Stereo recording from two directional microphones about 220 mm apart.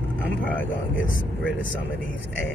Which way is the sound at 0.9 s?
60° left (ahead or behind).